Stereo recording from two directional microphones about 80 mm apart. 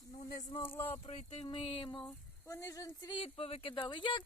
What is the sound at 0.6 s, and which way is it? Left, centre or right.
Speech, left.